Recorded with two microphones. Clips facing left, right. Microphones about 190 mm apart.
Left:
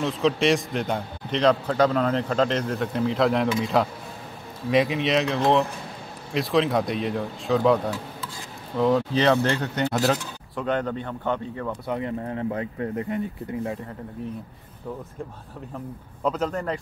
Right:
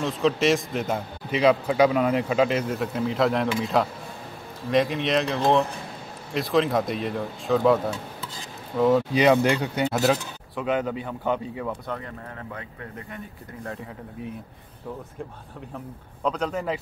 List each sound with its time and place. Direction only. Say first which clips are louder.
0.0 s a man's voice: even; centre (ahead or behind)
9.1 s speech: right 2 dB; 10° right (ahead or behind)
10.0 s speech: right 1 dB; 5° right (ahead or behind)
11.9 s speech: left 7 dB; 20° left (ahead or behind)
16.2 s a man's voice: left 1 dB; 5° left (ahead or behind)